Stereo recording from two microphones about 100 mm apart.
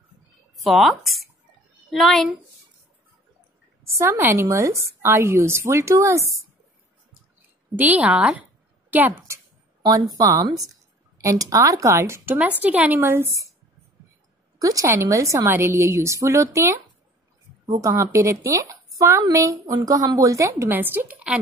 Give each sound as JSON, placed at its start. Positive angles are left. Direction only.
{"t": 0.6, "sound": "speech", "side_deg": 0}
{"t": 3.8, "sound": "a woman's voice", "side_deg": -25}
{"t": 7.7, "sound": "a woman's voice", "side_deg": -15}
{"t": 10.1, "sound": "a woman's voice", "side_deg": -35}
{"t": 12.4, "sound": "a woman's voice", "side_deg": -15}
{"t": 14.6, "sound": "a woman's voice", "side_deg": -35}